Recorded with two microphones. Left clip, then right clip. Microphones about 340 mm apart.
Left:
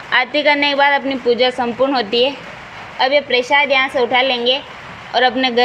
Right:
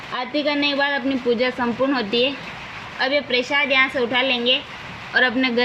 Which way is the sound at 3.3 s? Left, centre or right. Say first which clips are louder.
Left 5 dB; centre.